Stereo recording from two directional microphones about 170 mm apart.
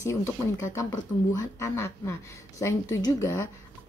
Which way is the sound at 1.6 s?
15° left (ahead or behind).